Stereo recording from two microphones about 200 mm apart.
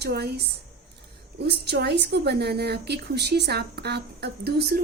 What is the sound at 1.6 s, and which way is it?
A woman's voice, 55° right (ahead or behind).